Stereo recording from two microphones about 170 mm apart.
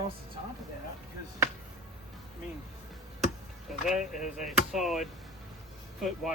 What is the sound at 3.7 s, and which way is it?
Speech, 5° right (ahead or behind).